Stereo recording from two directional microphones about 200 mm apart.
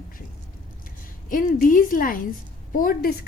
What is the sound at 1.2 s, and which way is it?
A woman's voice, 40° left (ahead or behind).